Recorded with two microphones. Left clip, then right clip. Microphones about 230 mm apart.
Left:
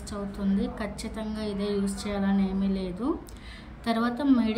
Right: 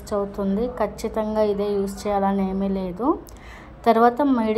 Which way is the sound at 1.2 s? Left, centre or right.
Centre.